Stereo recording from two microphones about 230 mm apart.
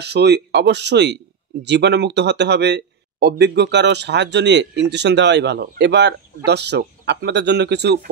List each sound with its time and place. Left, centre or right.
0.0 s speech: right